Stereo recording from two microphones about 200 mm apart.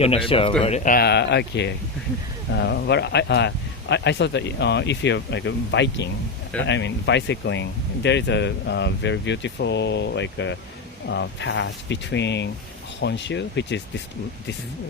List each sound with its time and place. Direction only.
0.0 s speech: 30° left (ahead or behind); by 13.8 s 60° left (ahead or behind)